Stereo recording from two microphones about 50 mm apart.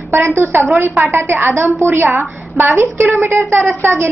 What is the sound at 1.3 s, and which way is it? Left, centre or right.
A woman's voice, right.